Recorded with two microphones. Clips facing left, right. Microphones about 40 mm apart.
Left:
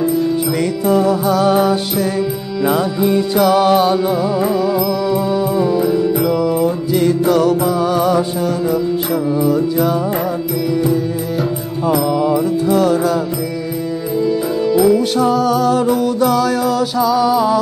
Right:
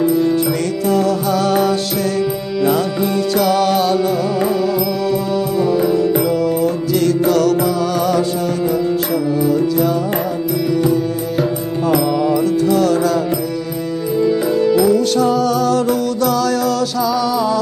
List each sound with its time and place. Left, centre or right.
0.8 s music: centre
5.1 s music: centre
6.4 s music: centre
9.4 s music: centre
11.9 s music: centre
12.4 s music: centre
14.2 s music: centre
14.9 s music: centre